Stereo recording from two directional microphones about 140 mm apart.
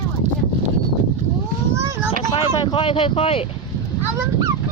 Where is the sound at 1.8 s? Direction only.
20° right (ahead or behind).